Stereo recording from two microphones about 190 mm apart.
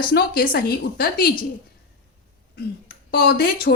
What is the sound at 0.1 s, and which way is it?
Speech, 55° left (ahead or behind).